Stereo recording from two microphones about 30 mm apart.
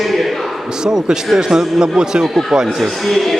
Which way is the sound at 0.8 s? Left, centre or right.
Right.